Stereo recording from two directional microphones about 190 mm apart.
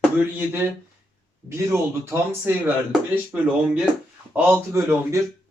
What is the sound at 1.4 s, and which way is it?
A man's voice, 15° right (ahead or behind).